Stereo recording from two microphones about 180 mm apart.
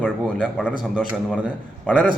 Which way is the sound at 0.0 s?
5° left (ahead or behind).